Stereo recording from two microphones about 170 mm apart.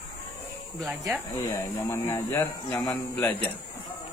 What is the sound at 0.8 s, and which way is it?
Speech, centre (ahead or behind).